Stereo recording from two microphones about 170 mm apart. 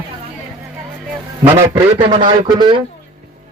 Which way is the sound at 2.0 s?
30° right (ahead or behind).